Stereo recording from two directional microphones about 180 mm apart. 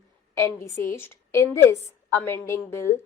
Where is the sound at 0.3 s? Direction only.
15° left (ahead or behind).